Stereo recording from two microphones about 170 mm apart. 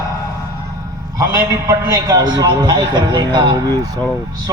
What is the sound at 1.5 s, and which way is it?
A man's voice, 20° right (ahead or behind).